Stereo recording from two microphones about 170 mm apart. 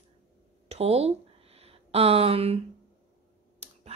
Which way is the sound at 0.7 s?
35° right (ahead or behind).